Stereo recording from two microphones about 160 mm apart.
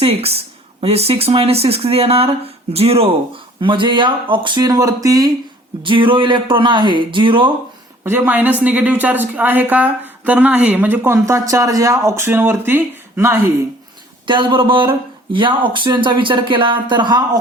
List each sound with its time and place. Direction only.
0.0 s speech: 40° right (ahead or behind)
8.0 s a woman's voice: 15° right (ahead or behind)
14.3 s speech: 30° right (ahead or behind)